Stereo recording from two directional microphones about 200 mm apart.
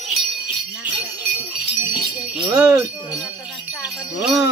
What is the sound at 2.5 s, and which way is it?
Wind chime, 15° right (ahead or behind).